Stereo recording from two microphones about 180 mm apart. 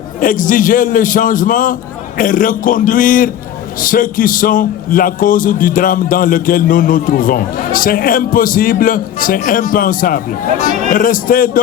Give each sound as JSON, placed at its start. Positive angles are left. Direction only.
{"t": 0.2, "sound": "a man's voice", "side_deg": 50}